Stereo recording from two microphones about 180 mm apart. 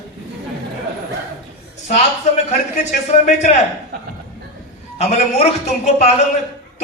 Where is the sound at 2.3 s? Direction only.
40° left (ahead or behind).